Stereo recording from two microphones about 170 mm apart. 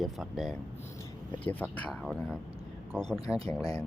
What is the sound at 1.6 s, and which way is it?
Speech, 5° left (ahead or behind).